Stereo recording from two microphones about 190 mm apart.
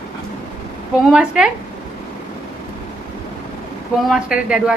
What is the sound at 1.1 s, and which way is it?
Speech, 5° right (ahead or behind).